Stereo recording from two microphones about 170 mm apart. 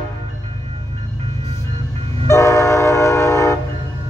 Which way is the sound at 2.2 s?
15° left (ahead or behind).